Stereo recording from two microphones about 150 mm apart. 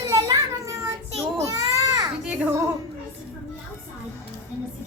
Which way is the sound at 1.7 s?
20° right (ahead or behind).